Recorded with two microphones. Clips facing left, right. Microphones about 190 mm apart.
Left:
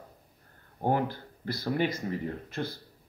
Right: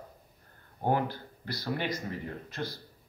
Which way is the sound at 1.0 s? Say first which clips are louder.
Left 3 dB; 50° left (ahead or behind).